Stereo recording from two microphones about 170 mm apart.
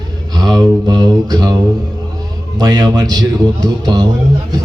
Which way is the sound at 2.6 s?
25° right (ahead or behind).